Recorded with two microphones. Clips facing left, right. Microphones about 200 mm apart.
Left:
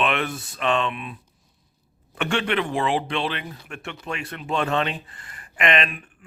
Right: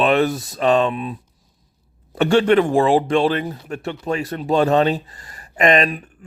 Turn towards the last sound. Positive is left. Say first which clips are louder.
# right 7 dB
turn(degrees=-40)  # may be behind; listen again after turning